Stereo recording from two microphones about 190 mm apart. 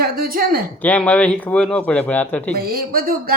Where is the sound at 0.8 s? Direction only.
5° left (ahead or behind).